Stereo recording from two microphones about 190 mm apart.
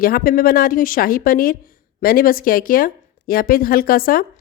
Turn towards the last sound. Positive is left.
turn(degrees=50)  # may be behind; listen again after turning